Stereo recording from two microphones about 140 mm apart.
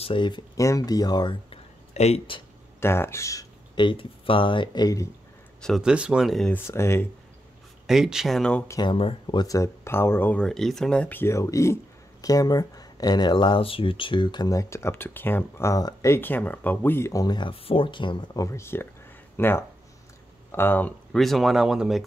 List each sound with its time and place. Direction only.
0.0 s speech: 35° left (ahead or behind)
0.6 s speech: 25° left (ahead or behind)
1.5 s a sound: 50° left (ahead or behind)
2.8 s speech: 20° left (ahead or behind)
5.6 s speech: centre (ahead or behind)
6.5 s speech: 20° left (ahead or behind)
7.8 s speech: 5° right (ahead or behind)
8.6 s speech: 25° left (ahead or behind)
18.4 s speech: 20° left (ahead or behind)
21.2 s speech: centre (ahead or behind)